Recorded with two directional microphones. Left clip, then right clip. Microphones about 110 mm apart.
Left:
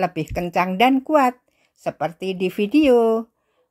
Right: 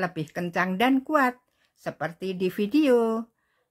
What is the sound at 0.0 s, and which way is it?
A woman's voice, 45° left (ahead or behind).